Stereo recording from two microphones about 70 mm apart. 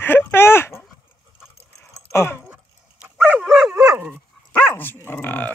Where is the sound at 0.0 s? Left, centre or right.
Left.